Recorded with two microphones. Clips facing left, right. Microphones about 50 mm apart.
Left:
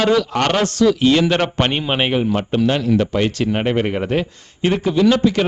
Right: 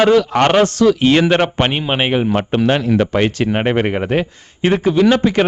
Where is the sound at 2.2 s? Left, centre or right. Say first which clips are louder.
Right 2 dB; right.